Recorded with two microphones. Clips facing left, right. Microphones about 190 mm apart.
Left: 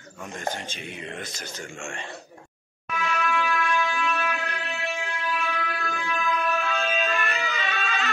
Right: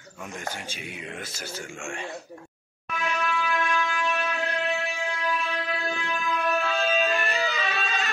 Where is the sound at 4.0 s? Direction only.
20° right (ahead or behind).